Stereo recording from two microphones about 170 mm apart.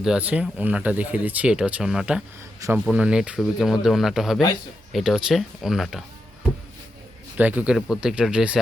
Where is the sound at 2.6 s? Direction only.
20° right (ahead or behind).